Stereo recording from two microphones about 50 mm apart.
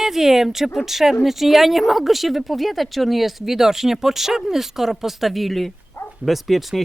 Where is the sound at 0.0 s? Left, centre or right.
Centre.